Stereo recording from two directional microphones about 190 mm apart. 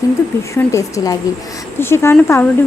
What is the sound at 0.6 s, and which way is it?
Speech, 15° left (ahead or behind).